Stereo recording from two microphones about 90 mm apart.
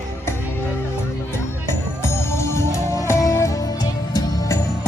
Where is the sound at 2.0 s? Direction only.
30° left (ahead or behind).